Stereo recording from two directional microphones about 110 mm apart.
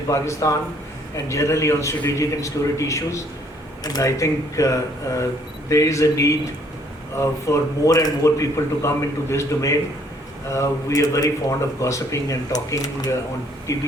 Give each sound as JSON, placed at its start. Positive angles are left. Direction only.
{"t": 0.1, "sound": "speech", "side_deg": 30}